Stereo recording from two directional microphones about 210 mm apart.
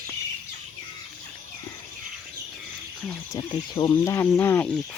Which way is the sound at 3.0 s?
20° left (ahead or behind).